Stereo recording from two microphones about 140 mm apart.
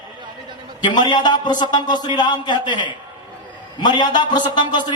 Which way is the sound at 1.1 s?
30° left (ahead or behind).